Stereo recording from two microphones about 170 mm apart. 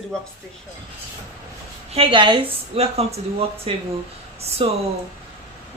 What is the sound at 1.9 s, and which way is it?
A woman's voice, 30° right (ahead or behind).